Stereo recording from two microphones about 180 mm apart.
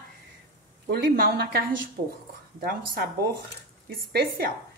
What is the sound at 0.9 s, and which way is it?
Speech, 55° right (ahead or behind).